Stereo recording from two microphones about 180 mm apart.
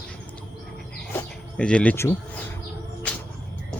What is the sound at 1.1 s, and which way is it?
Insect, 5° left (ahead or behind).